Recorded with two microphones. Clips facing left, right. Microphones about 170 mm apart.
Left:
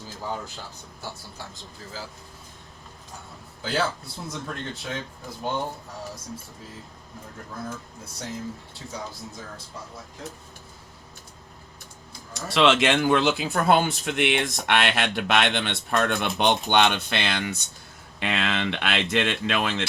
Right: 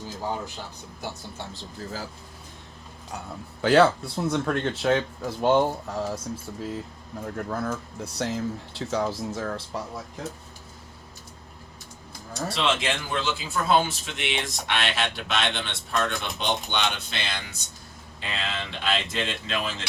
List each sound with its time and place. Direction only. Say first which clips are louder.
3.6 s speech: right 9 dB; 70° right (ahead or behind); by 6.1 s 85° right
7.5 s speech: right 3 dB; 75° right (ahead or behind)
12.5 s speech: left 8 dB; 75° left (ahead or behind)